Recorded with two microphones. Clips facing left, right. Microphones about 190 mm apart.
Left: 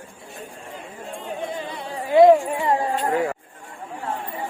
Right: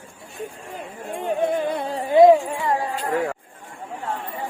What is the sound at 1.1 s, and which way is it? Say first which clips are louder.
Music: right 8 dB; 55° right (ahead or behind).